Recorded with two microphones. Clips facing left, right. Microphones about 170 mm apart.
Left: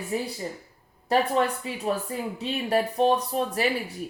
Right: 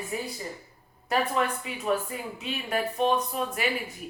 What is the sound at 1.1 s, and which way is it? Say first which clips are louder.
Speech: left 4 dB; 35° left (ahead or behind).